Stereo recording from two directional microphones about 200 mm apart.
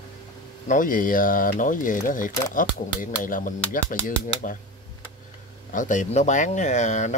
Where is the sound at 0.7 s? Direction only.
45° left (ahead or behind).